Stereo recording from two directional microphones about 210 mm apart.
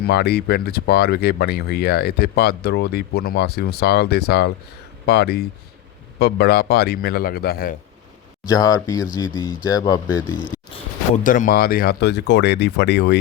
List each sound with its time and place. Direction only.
0.0 s speech: 50° left (ahead or behind)
8.4 s speech: 15° left (ahead or behind)
10.8 s speech: 35° left (ahead or behind); by 13.1 s 55° left (ahead or behind)